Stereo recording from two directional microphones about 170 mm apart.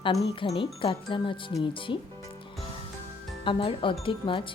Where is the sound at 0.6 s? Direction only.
30° left (ahead or behind).